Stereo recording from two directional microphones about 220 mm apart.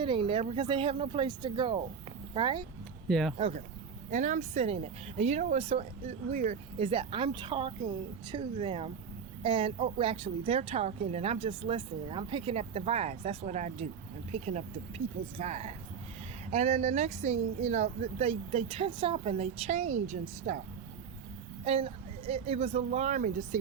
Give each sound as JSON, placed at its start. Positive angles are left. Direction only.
{"t": 0.0, "sound": "a woman's voice", "side_deg": -25}
{"t": 3.1, "sound": "speech", "side_deg": 0}
{"t": 3.3, "sound": "a woman's voice", "side_deg": -25}
{"t": 21.6, "sound": "a woman's voice", "side_deg": -25}